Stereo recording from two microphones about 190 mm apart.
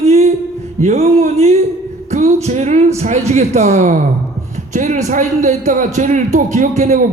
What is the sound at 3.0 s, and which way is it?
A man's voice, 35° right (ahead or behind).